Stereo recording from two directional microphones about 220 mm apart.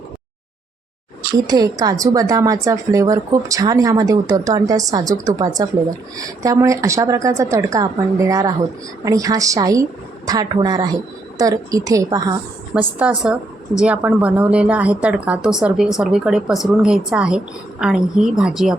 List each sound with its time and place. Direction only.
1.3 s speech: 15° right (ahead or behind)
12.7 s speech: 5° right (ahead or behind)